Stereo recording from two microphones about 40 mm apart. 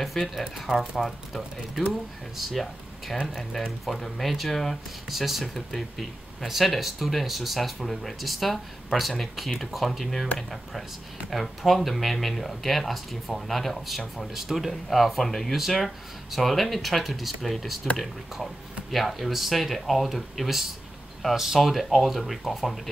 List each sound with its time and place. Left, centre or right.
0.0 s speech: centre
11.2 s speech: centre